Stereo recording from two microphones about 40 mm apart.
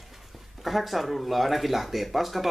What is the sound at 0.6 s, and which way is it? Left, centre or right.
Speech, centre.